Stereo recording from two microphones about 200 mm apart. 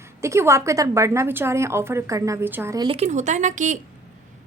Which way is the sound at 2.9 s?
30° right (ahead or behind).